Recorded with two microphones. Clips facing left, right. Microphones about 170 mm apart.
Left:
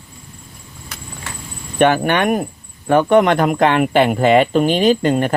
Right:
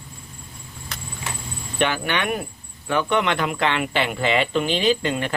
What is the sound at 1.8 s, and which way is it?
Speech, 50° left (ahead or behind).